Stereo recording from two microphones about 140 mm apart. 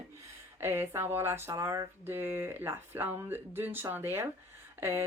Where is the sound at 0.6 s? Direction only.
15° right (ahead or behind).